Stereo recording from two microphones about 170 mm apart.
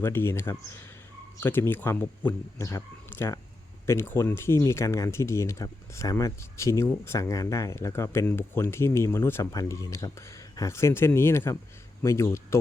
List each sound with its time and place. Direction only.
0.0 s speech: 15° left (ahead or behind)